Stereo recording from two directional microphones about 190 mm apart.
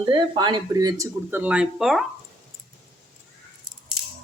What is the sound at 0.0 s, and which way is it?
Speech, 25° right (ahead or behind).